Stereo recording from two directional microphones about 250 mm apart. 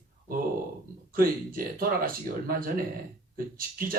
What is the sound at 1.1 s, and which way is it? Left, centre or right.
Speech, right.